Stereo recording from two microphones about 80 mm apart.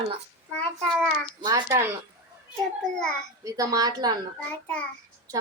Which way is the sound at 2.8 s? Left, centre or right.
Centre.